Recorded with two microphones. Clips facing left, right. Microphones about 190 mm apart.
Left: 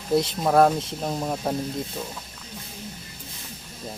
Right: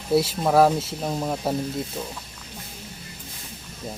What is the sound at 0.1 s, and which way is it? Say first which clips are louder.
Speech: right 1 dB; 5° right (ahead or behind).